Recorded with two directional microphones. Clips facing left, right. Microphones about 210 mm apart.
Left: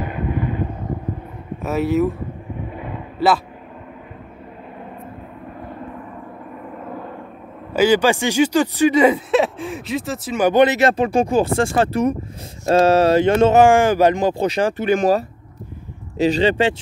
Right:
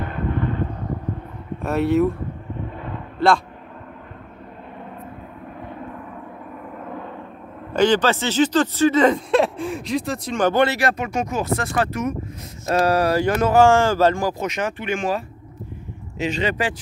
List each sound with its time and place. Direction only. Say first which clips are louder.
0.0 s vehicle: left 1 dB; 10° left (ahead or behind)
1.6 s speech: even; centre (ahead or behind)
2.7 s a sound: left 2 dB; 10° left (ahead or behind)
6.8 s vehicle: left 1 dB; 5° left (ahead or behind)
7.7 s speech: left 2 dB; 10° left (ahead or behind)
10.5 s speech: left 5 dB; 20° left (ahead or behind)
14.4 s speech: left 6 dB; 35° left (ahead or behind)